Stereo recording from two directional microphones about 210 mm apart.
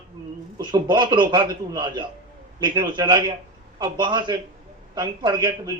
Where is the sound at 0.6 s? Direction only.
20° right (ahead or behind).